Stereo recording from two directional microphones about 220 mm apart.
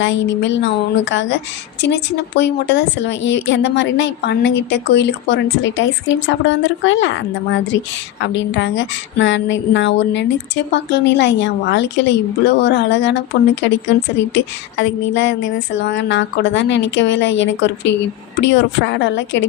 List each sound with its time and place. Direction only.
0.0 s a woman's voice: 55° left (ahead or behind)